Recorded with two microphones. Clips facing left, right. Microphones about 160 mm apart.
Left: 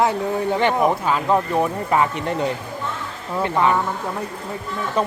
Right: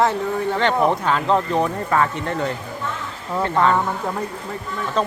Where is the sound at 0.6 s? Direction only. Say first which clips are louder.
Right 1 dB; 10° left (ahead or behind).